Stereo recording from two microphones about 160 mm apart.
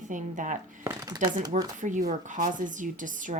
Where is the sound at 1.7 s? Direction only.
50° right (ahead or behind).